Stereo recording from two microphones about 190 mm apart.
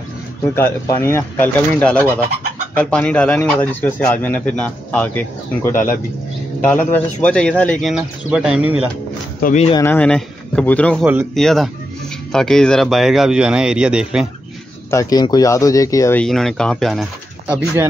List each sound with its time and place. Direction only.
0.6 s speech: 15° left (ahead or behind)
8.3 s speech: 5° right (ahead or behind)
9.4 s speech: 40° left (ahead or behind)
9.8 s speech: 5° left (ahead or behind)
14.9 s speech: 15° left (ahead or behind)
16.3 s speech: centre (ahead or behind)